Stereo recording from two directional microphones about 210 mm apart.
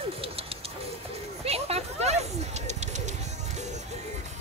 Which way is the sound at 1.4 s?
30° right (ahead or behind).